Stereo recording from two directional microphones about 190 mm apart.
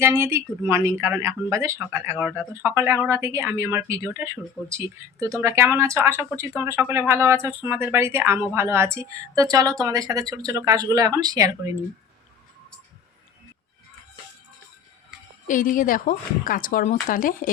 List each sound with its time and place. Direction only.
0.0 s speech: 15° right (ahead or behind)
15.4 s speech: 45° left (ahead or behind)